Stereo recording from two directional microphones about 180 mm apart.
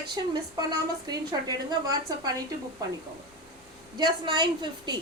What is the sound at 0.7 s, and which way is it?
A woman's voice, 20° right (ahead or behind).